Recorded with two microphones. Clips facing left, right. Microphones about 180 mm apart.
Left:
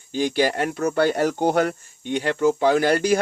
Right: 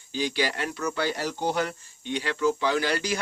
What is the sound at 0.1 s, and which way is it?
Speech, 50° left (ahead or behind).